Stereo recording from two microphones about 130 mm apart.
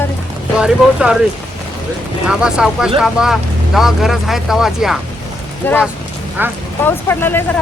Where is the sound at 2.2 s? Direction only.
5° right (ahead or behind).